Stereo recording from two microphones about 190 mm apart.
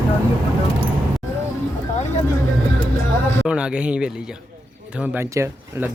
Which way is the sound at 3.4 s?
5° right (ahead or behind).